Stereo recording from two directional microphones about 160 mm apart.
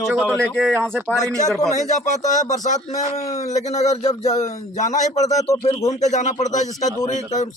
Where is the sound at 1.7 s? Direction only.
50° left (ahead or behind).